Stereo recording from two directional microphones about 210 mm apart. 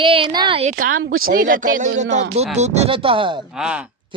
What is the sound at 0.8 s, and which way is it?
Speech, 75° right (ahead or behind).